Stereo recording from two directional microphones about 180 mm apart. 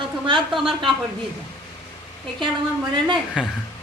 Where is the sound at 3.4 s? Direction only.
5° right (ahead or behind).